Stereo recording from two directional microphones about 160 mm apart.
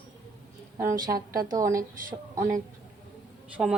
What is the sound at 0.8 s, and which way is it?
A woman's voice, 20° right (ahead or behind).